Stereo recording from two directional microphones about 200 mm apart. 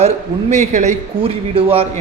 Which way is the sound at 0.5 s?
35° right (ahead or behind).